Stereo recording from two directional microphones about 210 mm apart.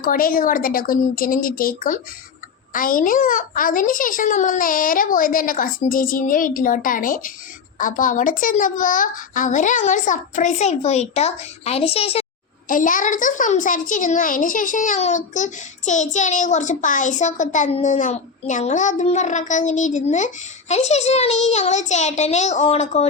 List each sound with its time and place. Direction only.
0.0 s a woman's voice: 45° left (ahead or behind)
12.6 s a child's voice: 40° left (ahead or behind)